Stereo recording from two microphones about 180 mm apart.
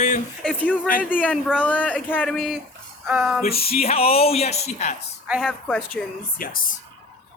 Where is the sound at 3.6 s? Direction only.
35° left (ahead or behind).